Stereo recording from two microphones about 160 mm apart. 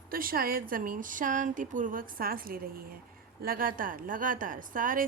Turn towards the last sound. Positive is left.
turn(degrees=-60)  # may be behind; listen again after turning